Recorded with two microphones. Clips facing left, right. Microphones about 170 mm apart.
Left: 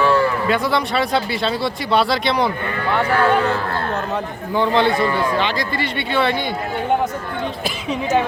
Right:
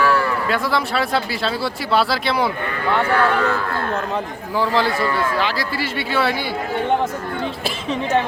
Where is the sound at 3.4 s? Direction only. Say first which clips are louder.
Left 1 dB; 30° left (ahead or behind).